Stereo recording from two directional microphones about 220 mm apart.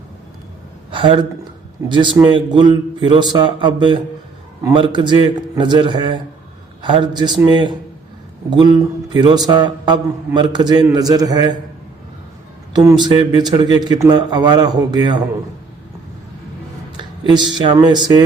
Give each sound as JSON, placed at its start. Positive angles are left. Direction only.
{"t": 0.9, "sound": "a man's voice", "side_deg": -20}
{"t": 12.7, "sound": "a man's voice", "side_deg": -20}
{"t": 17.0, "sound": "speech", "side_deg": -20}